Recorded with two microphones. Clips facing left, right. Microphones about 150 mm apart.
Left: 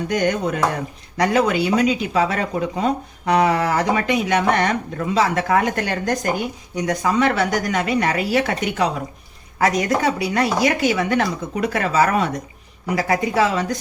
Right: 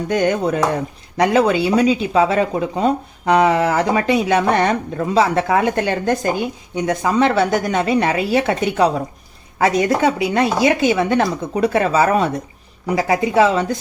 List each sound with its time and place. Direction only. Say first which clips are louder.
0.1 s speech: right 4 dB; 30° right (ahead or behind)